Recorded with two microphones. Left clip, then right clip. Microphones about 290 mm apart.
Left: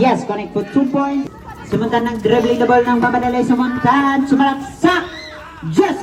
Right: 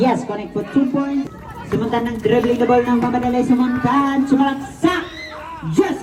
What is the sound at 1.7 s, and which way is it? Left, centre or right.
Speech, left.